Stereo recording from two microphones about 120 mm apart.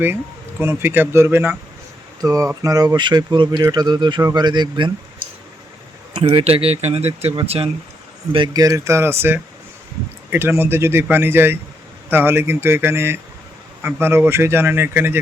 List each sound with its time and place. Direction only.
0.6 s speech: 20° right (ahead or behind); by 4.9 s 35° right (ahead or behind)
6.2 s speech: 55° right (ahead or behind)
8.5 s speech: 30° right (ahead or behind)